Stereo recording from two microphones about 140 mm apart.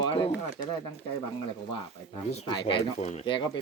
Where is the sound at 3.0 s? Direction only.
50° left (ahead or behind).